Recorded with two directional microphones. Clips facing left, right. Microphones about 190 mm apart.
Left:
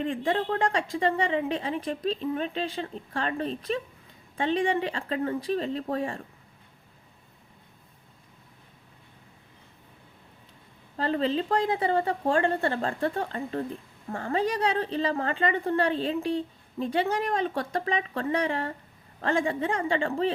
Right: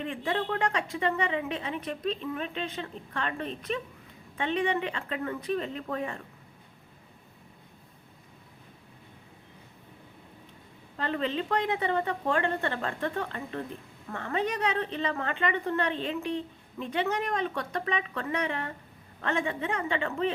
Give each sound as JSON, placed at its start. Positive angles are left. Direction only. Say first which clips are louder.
{"t": 0.0, "sound": "a woman's voice", "louder": "left 4 dB", "side_deg": 35}
{"t": 10.9, "sound": "a woman's voice", "louder": "left 4 dB", "side_deg": 35}